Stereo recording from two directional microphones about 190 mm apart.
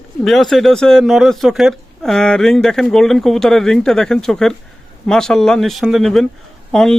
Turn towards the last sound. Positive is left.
turn(degrees=5)  # may be behind; listen again after turning